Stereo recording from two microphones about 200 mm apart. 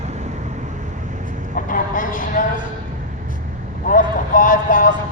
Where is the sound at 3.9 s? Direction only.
40° left (ahead or behind).